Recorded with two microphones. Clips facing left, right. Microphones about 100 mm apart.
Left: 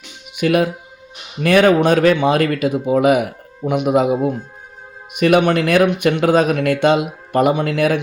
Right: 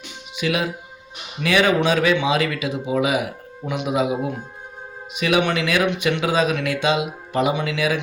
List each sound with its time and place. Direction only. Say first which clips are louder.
0.3 s speech: left 7 dB; 50° left (ahead or behind)